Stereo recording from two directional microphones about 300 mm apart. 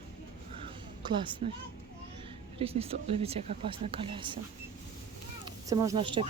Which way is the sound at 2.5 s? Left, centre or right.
Centre.